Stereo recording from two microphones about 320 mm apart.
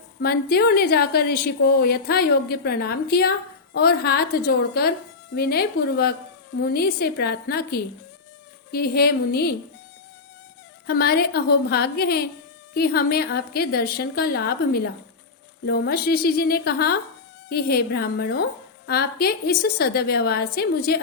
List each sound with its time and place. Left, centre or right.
0.2 s a woman's voice: left
10.8 s a woman's voice: left